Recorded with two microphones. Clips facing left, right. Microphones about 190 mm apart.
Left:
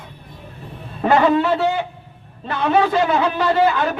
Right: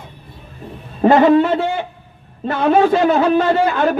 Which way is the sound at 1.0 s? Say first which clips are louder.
Right 5 dB; 45° right (ahead or behind).